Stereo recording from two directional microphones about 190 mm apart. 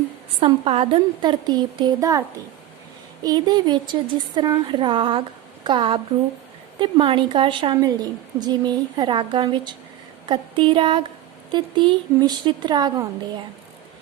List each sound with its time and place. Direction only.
0.3 s a woman's voice: 30° right (ahead or behind)
3.2 s a woman's voice: 20° right (ahead or behind)